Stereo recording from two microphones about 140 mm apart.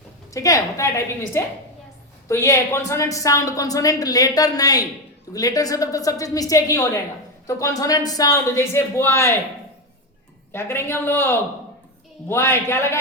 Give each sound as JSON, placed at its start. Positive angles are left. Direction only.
{"t": 0.3, "sound": "speech", "side_deg": 25}
{"t": 10.5, "sound": "a woman's voice", "side_deg": 15}